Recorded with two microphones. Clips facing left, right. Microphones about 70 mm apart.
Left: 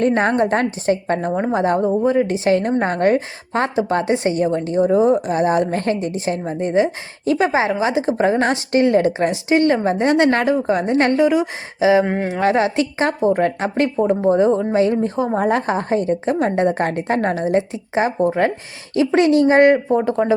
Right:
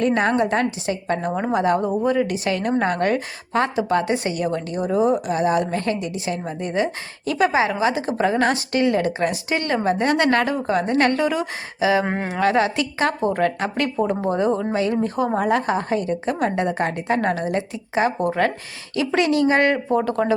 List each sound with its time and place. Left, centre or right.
0.0 s a woman's voice: left
12.0 s speech: centre
12.4 s a woman's voice: left